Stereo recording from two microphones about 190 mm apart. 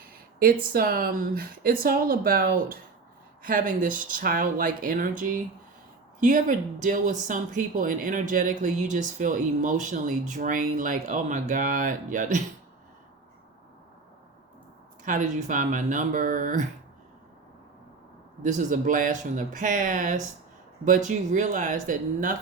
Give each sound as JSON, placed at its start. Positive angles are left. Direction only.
{"t": 0.3, "sound": "speech", "side_deg": -50}
{"t": 15.0, "sound": "speech", "side_deg": -40}
{"t": 18.4, "sound": "speech", "side_deg": -40}